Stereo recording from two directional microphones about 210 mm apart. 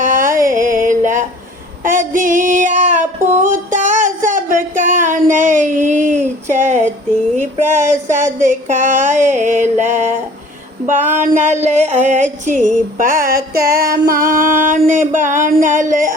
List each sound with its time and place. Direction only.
0.0 s music: 40° right (ahead or behind)
1.8 s female singing: 40° right (ahead or behind)
3.3 s a sound: 35° right (ahead or behind)
7.3 s female singing: 35° right (ahead or behind)